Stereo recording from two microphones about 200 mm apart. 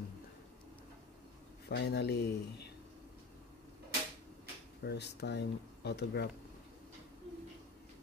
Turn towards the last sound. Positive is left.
turn(degrees=55)  # may be behind; listen again after turning